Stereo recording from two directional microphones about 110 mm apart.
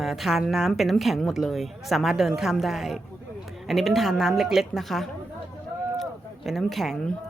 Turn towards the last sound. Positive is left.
turn(degrees=5)  # may be behind; listen again after turning